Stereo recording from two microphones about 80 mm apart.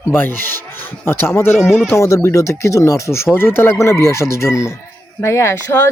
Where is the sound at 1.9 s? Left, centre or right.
Left.